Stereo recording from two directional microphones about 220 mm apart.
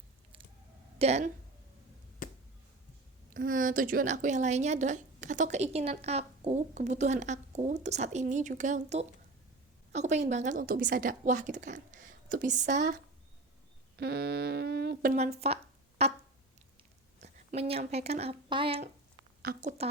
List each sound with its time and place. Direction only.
0.9 s a woman's voice: 30° right (ahead or behind)
2.2 s a sound: 35° left (ahead or behind)
3.3 s a woman's voice: 40° right (ahead or behind)
14.0 s speech: 45° right (ahead or behind)
15.1 s speech: 30° right (ahead or behind)
17.2 s a woman's voice: 30° right (ahead or behind)
19.4 s a woman's voice: 45° right (ahead or behind)